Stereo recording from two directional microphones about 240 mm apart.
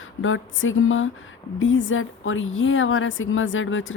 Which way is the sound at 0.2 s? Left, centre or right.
Left.